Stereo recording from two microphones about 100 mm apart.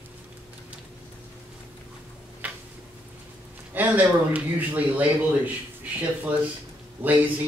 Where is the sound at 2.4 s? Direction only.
15° right (ahead or behind).